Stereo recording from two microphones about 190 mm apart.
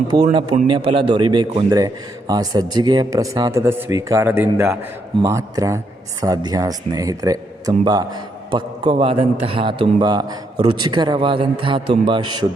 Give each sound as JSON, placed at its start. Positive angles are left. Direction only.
{"t": 0.1, "sound": "speech", "side_deg": -20}